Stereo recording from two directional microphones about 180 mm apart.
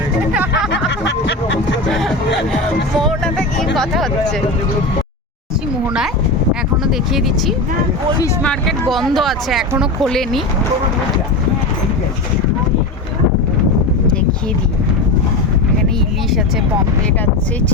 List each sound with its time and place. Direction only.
0.7 s a sound: 75° left (ahead or behind)
1.9 s music: centre (ahead or behind)
3.8 s speech: centre (ahead or behind)
6.5 s speech: centre (ahead or behind)